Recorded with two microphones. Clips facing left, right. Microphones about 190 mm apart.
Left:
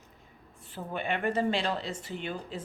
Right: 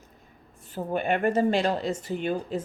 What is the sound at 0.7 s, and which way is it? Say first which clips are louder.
Speech: right 7 dB; 45° right (ahead or behind).